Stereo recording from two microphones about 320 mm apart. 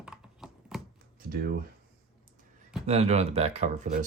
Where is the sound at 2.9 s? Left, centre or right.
Centre.